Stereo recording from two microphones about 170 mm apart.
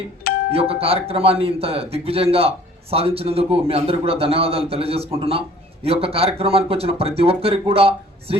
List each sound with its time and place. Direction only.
0.5 s a man's voice: 35° right (ahead or behind)